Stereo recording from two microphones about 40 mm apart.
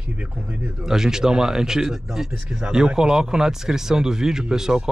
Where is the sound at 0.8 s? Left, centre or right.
Centre.